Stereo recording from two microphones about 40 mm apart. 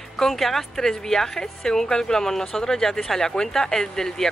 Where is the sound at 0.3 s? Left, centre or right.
Centre.